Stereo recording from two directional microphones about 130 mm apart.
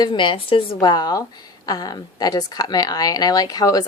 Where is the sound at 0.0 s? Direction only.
40° left (ahead or behind).